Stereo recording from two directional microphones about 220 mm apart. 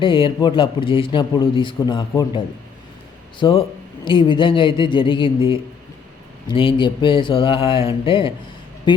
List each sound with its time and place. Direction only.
0.0 s a man's voice: 25° left (ahead or behind)
3.4 s a man's voice: 20° left (ahead or behind)